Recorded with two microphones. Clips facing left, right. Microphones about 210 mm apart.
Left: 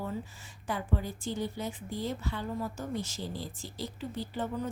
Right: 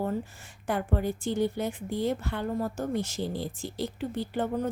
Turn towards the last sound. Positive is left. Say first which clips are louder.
# right 5 dB
turn(degrees=-60)  # may be behind; listen again after turning